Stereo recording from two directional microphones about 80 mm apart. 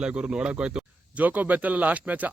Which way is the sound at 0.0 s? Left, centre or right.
Centre.